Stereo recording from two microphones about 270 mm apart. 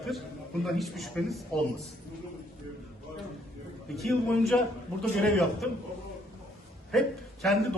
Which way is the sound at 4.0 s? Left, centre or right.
Centre.